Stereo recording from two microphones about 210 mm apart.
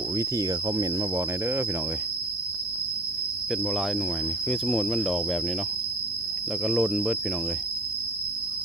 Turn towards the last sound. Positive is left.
turn(degrees=-5)  # may be behind; listen again after turning